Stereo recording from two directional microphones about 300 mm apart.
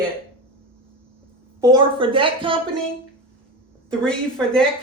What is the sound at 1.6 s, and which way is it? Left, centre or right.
A woman's voice, centre.